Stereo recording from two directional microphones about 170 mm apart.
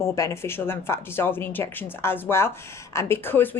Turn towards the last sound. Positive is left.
turn(degrees=10)  # may be behind; listen again after turning